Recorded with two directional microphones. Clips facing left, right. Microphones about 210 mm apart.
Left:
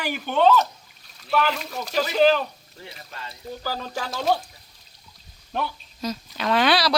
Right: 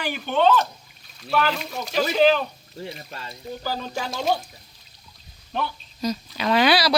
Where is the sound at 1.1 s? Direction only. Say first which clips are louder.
Even; centre (ahead or behind).